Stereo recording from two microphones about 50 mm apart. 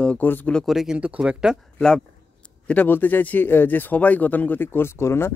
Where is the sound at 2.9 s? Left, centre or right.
Left.